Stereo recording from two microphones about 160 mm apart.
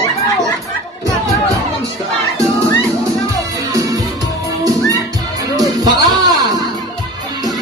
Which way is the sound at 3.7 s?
20° right (ahead or behind).